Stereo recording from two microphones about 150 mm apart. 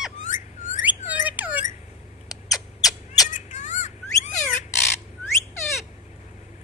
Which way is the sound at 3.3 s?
55° left (ahead or behind).